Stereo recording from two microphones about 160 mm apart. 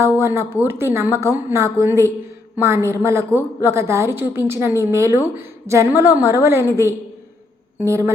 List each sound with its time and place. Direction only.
0.0 s a woman's voice: 15° right (ahead or behind)